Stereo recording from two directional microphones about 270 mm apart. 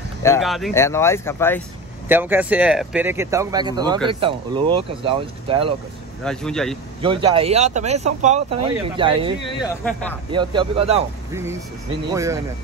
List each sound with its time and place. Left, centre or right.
0.4 s speech: centre
2.0 s speech: centre
6.2 s speech: centre
7.0 s speech: centre
9.6 s speech: centre
10.3 s speech: centre
12.1 s speech: centre